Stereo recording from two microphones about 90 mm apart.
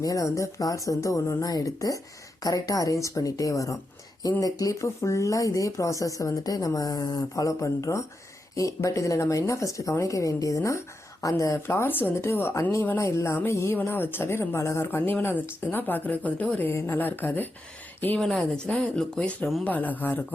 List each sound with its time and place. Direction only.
0.0 s a woman's voice: 40° left (ahead or behind); by 17.5 s 20° left (ahead or behind)
18.2 s speech: 5° left (ahead or behind); by 20.2 s 20° left (ahead or behind)